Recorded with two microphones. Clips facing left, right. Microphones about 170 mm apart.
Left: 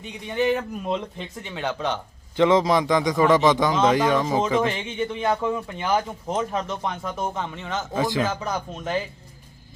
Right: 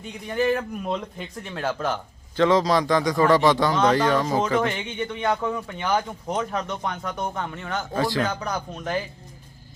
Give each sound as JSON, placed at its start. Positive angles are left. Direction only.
{"t": 0.3, "sound": "speech", "side_deg": 0}
{"t": 2.3, "sound": "a man's voice", "side_deg": 20}